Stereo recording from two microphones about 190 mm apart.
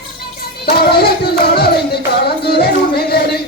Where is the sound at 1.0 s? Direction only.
55° left (ahead or behind).